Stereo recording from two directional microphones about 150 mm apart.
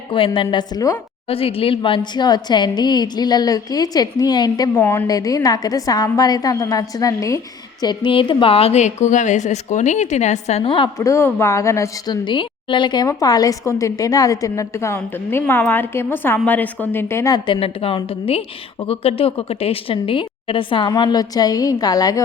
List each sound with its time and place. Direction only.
0.3 s a woman's voice: 30° left (ahead or behind)
1.3 s a woman's voice: 40° left (ahead or behind)
10.9 s a woman's voice: 20° left (ahead or behind)